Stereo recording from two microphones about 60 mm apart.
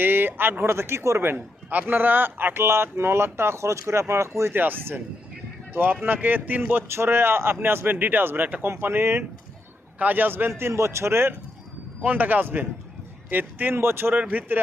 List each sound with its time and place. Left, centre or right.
0.0 s a sound: right
0.6 s a man's voice: right
4.5 s speech: right
6.8 s speech: right
10.6 s a man's voice: right
12.0 s a man's voice: right
14.2 s a man's voice: right